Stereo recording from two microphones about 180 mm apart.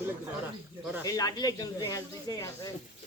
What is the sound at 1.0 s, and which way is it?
Speech, 20° left (ahead or behind).